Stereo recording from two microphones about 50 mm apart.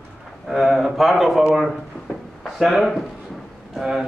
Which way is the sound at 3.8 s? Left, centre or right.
Centre.